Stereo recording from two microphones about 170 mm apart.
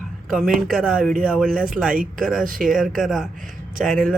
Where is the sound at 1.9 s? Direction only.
55° right (ahead or behind).